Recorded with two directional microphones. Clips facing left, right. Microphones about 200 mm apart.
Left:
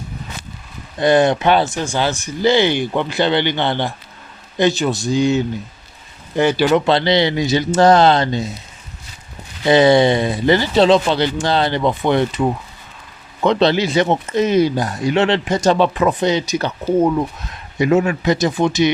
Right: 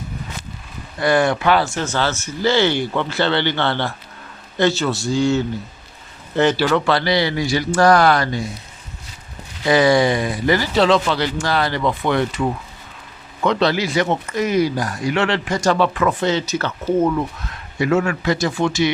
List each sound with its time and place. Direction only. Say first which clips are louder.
0.9 s speech: left 3 dB; 20° left (ahead or behind)
9.6 s speech: left 3 dB; 25° left (ahead or behind)